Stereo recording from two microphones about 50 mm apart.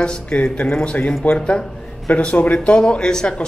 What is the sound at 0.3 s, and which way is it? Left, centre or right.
Speech, centre.